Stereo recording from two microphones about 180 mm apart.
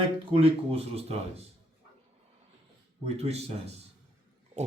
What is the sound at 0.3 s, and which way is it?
Speech, 35° right (ahead or behind).